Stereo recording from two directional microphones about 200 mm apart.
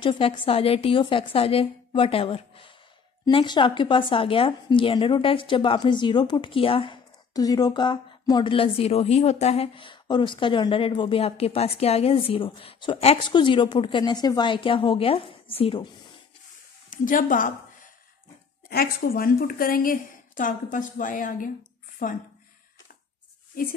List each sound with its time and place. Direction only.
0.0 s a woman's voice: 25° left (ahead or behind)
16.9 s speech: 40° left (ahead or behind)
18.7 s a woman's voice: 50° left (ahead or behind)